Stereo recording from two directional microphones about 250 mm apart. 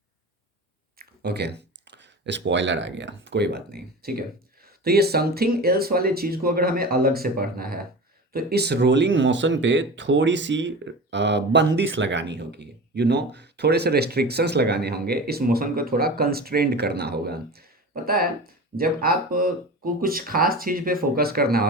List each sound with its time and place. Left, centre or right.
0.9 s speech: right